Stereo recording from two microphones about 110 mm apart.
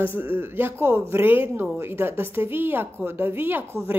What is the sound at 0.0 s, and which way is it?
A man's voice, 20° right (ahead or behind).